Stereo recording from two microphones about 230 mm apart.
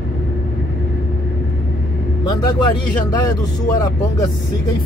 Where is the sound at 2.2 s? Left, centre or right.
Centre.